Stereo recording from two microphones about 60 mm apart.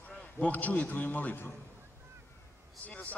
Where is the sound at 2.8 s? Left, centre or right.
Left.